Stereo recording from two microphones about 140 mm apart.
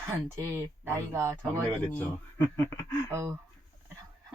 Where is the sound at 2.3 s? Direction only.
20° left (ahead or behind).